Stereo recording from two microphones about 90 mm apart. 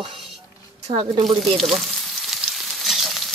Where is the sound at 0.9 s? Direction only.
90° right.